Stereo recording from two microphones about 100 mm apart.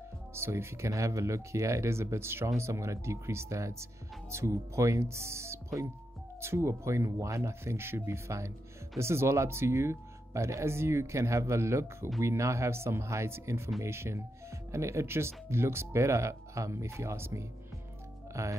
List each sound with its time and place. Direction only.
0.3 s speech: 25° right (ahead or behind)